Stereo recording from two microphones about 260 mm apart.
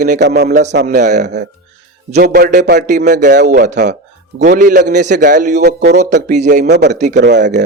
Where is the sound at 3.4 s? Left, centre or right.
Right.